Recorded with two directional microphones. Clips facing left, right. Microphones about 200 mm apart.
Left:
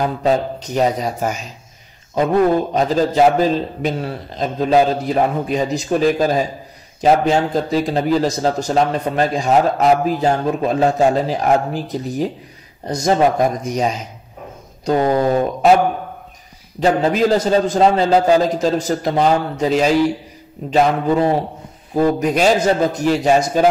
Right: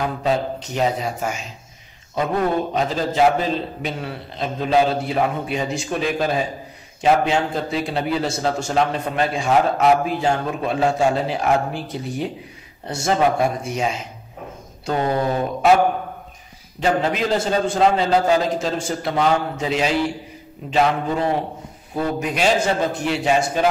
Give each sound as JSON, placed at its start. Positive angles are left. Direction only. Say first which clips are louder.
{"t": 0.0, "sound": "speech", "louder": "left 4 dB", "side_deg": 40}
{"t": 2.7, "sound": "speech", "louder": "left 5 dB", "side_deg": 40}
{"t": 16.8, "sound": "speech", "louder": "left 5 dB", "side_deg": 40}